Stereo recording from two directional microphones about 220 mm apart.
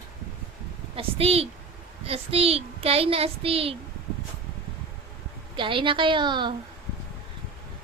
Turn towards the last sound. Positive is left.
turn(degrees=-20)  # may be behind; listen again after turning